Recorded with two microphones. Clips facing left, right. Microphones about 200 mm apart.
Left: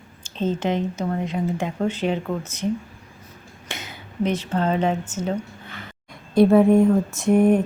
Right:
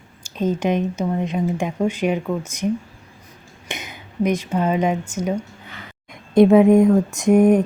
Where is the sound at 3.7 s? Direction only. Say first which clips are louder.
Right 3 dB; 15° right (ahead or behind).